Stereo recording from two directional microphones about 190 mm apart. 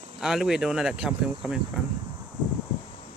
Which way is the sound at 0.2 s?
5° right (ahead or behind).